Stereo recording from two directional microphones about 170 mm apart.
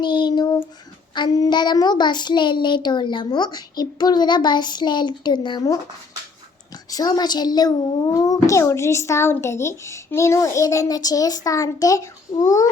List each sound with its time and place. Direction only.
0.0 s child singing: 25° left (ahead or behind)
1.1 s a child's voice: 25° left (ahead or behind)
6.9 s a child's voice: 20° left (ahead or behind)